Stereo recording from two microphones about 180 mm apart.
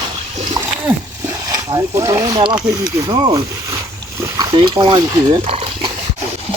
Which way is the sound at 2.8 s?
20° right (ahead or behind).